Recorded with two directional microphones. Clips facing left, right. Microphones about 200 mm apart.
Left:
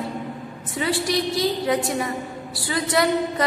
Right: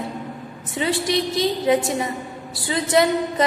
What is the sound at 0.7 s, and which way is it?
A woman's voice, 25° right (ahead or behind).